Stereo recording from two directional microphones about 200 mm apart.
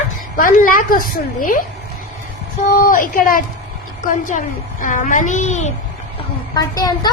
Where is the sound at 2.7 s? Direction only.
45° left (ahead or behind).